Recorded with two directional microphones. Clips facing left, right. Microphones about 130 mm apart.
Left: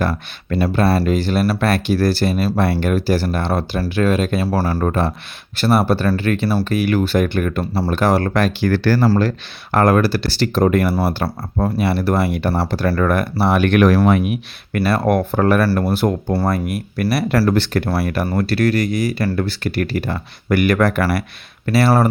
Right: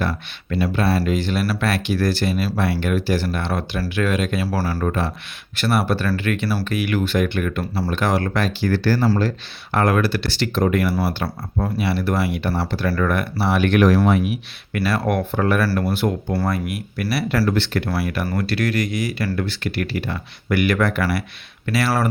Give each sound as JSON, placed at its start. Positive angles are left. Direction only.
{"t": 0.1, "sound": "speech", "side_deg": 45}
{"t": 9.7, "sound": "speech", "side_deg": 40}
{"t": 14.8, "sound": "speech", "side_deg": 40}
{"t": 15.9, "sound": "speech", "side_deg": 40}
{"t": 17.3, "sound": "speech", "side_deg": 60}
{"t": 17.6, "sound": "speech", "side_deg": 40}
{"t": 21.7, "sound": "speech", "side_deg": 35}